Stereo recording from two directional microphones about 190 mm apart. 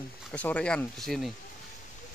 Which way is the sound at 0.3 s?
5° left (ahead or behind).